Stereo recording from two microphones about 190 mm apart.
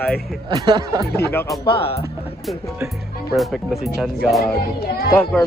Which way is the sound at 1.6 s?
30° left (ahead or behind).